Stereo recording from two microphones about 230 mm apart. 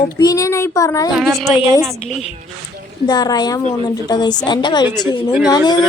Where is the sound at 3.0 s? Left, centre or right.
Centre.